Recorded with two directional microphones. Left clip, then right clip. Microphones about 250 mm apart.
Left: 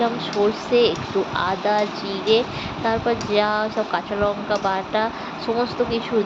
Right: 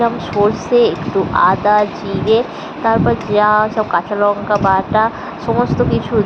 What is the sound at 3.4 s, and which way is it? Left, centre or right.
Speech, centre.